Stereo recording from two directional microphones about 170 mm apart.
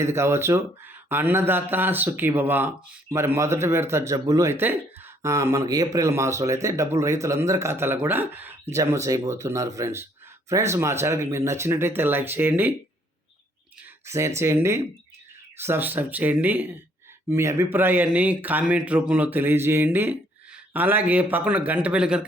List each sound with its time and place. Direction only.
0.0 s speech: 15° right (ahead or behind)
14.0 s speech: 15° right (ahead or behind)